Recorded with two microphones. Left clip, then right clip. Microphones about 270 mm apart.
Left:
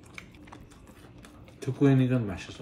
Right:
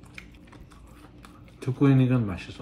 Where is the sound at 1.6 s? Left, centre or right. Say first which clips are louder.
Right 2 dB; centre.